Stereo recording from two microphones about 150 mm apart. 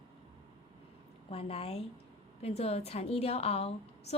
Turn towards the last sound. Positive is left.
turn(degrees=45)  # may be behind; listen again after turning